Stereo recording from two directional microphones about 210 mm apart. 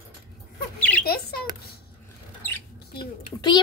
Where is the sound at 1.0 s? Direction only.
45° left (ahead or behind).